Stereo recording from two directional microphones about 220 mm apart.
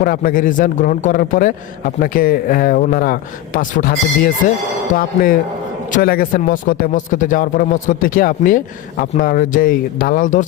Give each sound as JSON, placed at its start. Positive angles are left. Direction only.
{"t": 0.0, "sound": "speech", "side_deg": 40}